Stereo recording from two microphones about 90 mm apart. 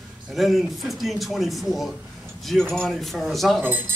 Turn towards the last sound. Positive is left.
turn(degrees=-20)  # may be behind; listen again after turning